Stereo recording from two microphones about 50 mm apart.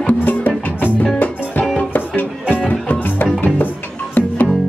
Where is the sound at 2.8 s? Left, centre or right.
Left.